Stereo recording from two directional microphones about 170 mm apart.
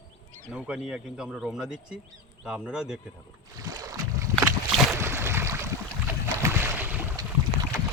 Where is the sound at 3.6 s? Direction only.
20° right (ahead or behind).